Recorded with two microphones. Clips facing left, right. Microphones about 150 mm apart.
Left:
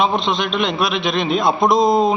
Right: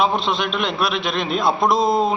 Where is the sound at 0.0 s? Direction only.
5° right (ahead or behind).